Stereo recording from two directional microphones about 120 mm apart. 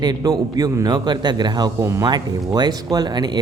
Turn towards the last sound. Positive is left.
turn(degrees=-35)  # may be behind; listen again after turning